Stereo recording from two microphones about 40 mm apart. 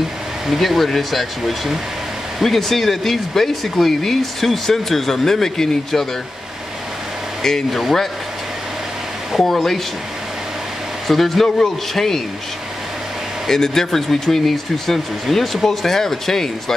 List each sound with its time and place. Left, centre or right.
0.5 s speech: centre
7.7 s speech: centre
9.5 s speech: centre
11.1 s speech: centre
13.5 s speech: centre